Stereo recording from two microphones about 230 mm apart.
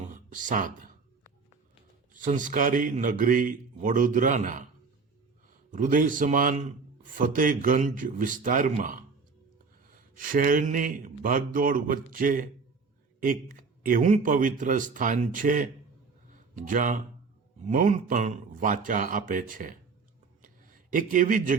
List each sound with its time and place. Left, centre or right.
0.1 s speech: right
2.1 s speech: right
5.7 s speech: right
20.4 s a sound: right